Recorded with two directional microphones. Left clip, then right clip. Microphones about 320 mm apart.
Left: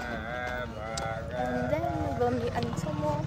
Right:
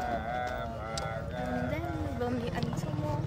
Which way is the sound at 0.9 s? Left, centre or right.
Centre.